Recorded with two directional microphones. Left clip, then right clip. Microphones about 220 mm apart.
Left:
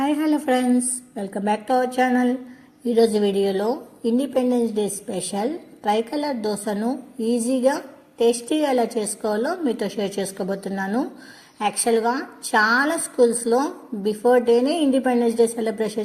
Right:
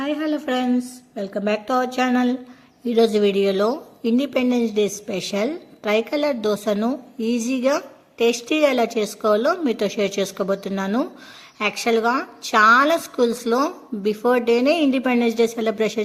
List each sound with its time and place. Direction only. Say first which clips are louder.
0.0 s a woman's voice: left 2 dB; centre (ahead or behind); by 16.0 s 20° right (ahead or behind)